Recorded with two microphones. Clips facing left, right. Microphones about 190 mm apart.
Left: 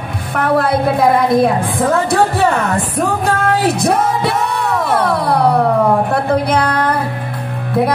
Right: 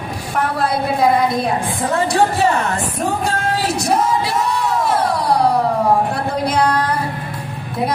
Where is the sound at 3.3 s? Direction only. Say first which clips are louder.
Left 5 dB; 55° left (ahead or behind).